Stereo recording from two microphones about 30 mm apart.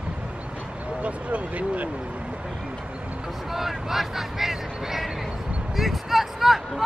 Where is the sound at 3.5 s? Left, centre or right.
Centre.